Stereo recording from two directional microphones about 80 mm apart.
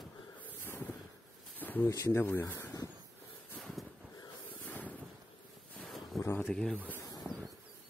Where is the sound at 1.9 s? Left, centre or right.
Left.